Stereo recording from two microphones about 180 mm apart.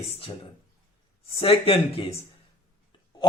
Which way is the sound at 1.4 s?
30° left (ahead or behind).